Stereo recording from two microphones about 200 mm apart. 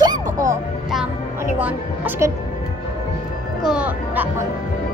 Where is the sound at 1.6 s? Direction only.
10° right (ahead or behind).